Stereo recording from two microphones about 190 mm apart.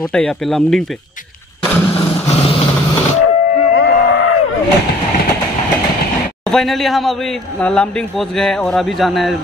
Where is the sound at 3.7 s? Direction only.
80° left.